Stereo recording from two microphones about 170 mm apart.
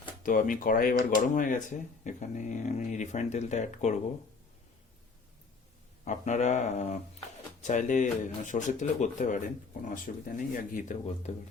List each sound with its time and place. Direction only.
0.2 s speech: 50° left (ahead or behind)
6.1 s speech: 45° left (ahead or behind)